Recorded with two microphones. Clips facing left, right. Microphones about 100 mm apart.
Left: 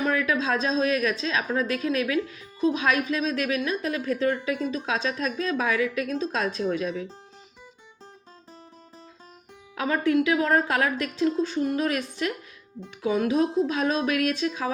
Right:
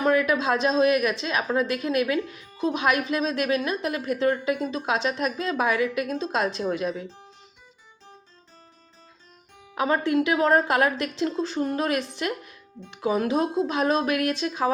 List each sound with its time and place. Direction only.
0.0 s a woman's voice: 20° right (ahead or behind)
9.7 s a woman's voice: 25° right (ahead or behind)